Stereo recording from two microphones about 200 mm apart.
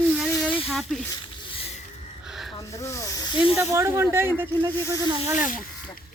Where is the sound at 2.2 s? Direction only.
Centre (ahead or behind).